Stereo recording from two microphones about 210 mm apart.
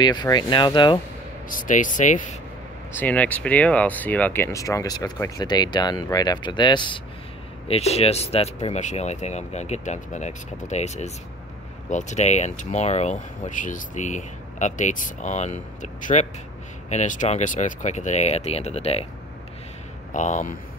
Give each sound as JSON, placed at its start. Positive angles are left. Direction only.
{"t": 0.0, "sound": "speech", "side_deg": 20}
{"t": 1.5, "sound": "speech", "side_deg": 40}
{"t": 3.0, "sound": "speech", "side_deg": 5}
{"t": 20.1, "sound": "speech", "side_deg": 35}